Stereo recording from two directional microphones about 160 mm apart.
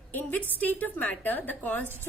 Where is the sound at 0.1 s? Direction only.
10° left (ahead or behind).